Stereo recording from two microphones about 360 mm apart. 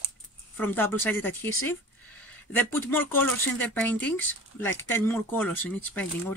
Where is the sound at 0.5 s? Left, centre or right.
Centre.